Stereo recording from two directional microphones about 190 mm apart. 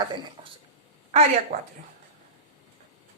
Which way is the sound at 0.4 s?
25° right (ahead or behind).